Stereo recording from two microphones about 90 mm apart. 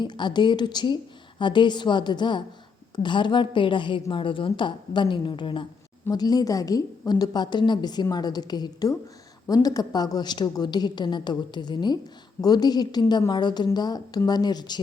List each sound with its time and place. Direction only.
0.0 s a woman's voice: 55° left (ahead or behind)
6.1 s a woman's voice: 45° left (ahead or behind)